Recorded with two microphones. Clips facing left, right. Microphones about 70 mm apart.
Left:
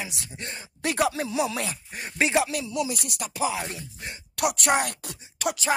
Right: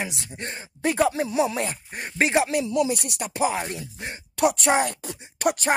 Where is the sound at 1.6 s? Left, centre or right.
Right.